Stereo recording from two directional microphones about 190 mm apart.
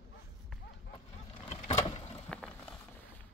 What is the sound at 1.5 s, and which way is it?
Vehicle, 35° left (ahead or behind).